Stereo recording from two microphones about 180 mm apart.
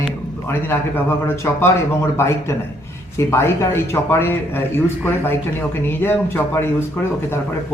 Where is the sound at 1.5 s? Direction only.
15° left (ahead or behind).